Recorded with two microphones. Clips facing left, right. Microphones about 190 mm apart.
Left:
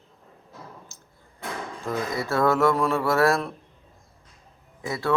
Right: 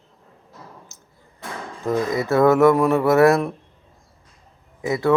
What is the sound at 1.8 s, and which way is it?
Speech, 20° right (ahead or behind).